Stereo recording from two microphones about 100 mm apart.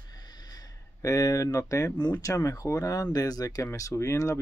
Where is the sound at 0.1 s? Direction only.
45° left (ahead or behind).